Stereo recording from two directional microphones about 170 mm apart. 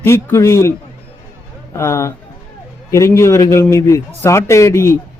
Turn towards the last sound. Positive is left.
turn(degrees=15)  # may be behind; listen again after turning